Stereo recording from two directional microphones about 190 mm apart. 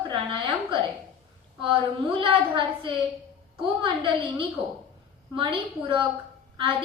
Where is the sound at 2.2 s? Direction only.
25° right (ahead or behind).